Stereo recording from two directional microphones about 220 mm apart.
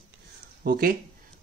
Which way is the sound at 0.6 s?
40° right (ahead or behind).